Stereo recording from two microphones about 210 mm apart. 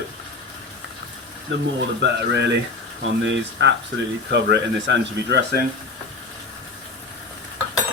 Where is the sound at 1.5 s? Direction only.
60° right (ahead or behind).